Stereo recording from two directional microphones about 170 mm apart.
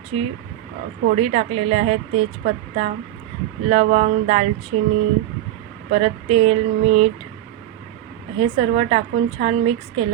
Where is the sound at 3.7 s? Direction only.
40° right (ahead or behind).